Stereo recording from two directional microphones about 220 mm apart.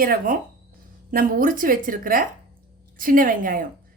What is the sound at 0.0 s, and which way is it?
A woman's voice, 40° right (ahead or behind).